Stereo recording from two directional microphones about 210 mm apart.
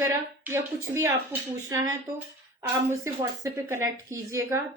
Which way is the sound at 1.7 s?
15° right (ahead or behind).